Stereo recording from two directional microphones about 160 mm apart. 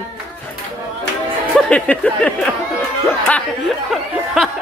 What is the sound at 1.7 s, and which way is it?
Speech, 10° left (ahead or behind).